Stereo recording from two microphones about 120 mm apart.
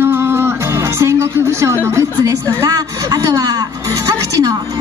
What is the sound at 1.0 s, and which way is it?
Speech, 20° right (ahead or behind).